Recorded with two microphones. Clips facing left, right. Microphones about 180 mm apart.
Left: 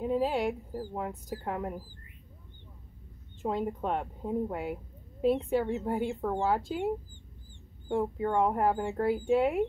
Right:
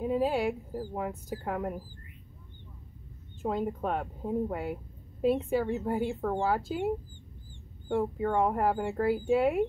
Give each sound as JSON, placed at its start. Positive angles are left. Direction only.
{"t": 0.0, "sound": "a sound", "side_deg": -5}
{"t": 0.9, "sound": "speech", "side_deg": 0}
{"t": 3.4, "sound": "speech", "side_deg": 0}
{"t": 7.9, "sound": "speech", "side_deg": 0}